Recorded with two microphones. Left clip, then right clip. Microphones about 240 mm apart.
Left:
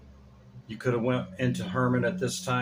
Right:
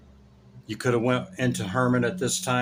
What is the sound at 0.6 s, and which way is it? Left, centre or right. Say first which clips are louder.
Speech: right 4 dB; right.